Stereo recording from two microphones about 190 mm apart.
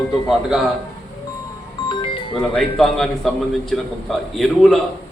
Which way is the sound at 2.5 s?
Centre (ahead or behind).